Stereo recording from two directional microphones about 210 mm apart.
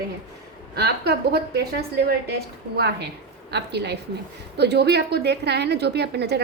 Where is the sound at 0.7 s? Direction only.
50° right (ahead or behind).